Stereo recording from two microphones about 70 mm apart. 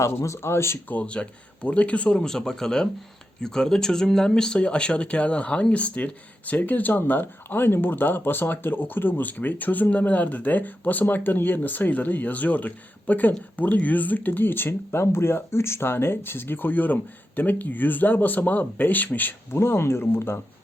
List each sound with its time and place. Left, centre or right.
0.0 s speech: left
0.9 s speech: centre
19.5 s speech: left